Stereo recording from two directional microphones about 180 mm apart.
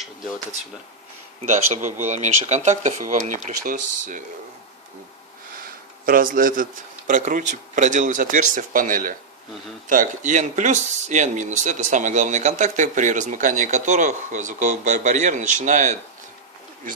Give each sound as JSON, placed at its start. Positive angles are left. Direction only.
{"t": 1.4, "sound": "speech", "side_deg": -40}
{"t": 5.6, "sound": "speech", "side_deg": -50}